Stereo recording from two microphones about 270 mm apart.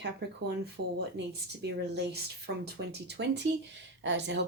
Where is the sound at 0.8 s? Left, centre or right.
Right.